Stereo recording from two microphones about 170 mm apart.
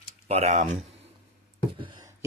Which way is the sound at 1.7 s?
30° right (ahead or behind).